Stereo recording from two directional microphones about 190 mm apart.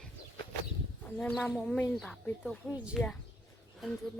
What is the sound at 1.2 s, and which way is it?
Speech, centre (ahead or behind).